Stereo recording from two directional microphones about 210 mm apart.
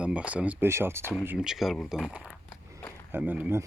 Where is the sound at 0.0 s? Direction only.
5° right (ahead or behind).